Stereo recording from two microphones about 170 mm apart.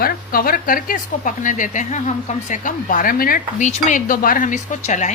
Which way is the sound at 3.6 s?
45° left (ahead or behind).